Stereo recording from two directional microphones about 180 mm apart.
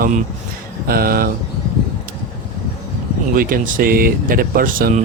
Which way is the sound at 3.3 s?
50° right (ahead or behind).